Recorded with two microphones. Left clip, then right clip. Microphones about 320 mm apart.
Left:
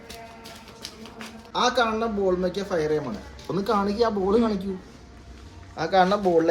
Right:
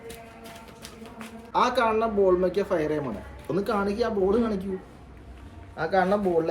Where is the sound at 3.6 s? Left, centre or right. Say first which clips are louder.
Left 4 dB; centre.